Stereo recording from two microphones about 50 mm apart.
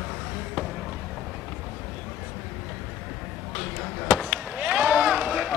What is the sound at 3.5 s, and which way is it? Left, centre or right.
Chop, centre.